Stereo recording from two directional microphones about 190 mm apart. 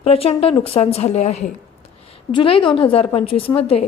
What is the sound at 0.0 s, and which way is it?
A woman's voice, 30° left (ahead or behind).